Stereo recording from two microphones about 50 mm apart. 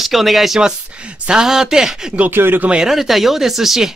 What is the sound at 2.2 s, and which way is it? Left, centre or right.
Speech, right.